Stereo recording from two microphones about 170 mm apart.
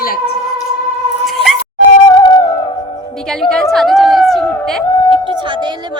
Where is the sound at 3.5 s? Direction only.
5° left (ahead or behind).